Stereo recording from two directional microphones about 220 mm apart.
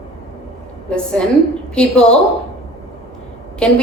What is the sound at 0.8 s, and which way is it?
A woman's voice, 5° left (ahead or behind).